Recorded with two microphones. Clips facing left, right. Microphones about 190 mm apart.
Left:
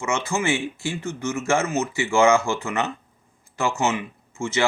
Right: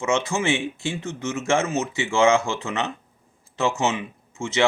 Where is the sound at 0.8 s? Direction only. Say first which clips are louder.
Left 1 dB; 20° right (ahead or behind).